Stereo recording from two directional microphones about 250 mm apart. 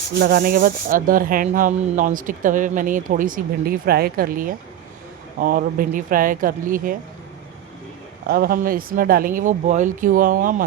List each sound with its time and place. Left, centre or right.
0.2 s speech: right
8.3 s speech: right